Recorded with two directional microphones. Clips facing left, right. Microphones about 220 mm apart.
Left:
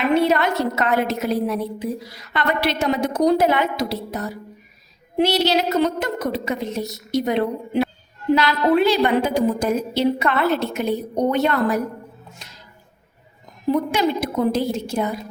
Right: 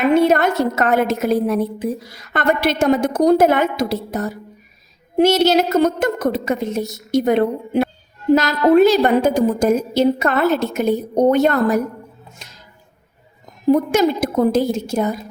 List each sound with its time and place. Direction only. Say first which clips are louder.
0.1 s a woman's voice: right 3 dB; 45° right (ahead or behind)
13.7 s a woman's voice: right 5 dB; 45° right (ahead or behind)